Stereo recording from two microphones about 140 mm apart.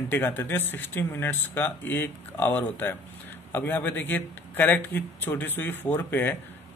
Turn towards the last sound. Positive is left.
turn(degrees=15)  # may be behind; listen again after turning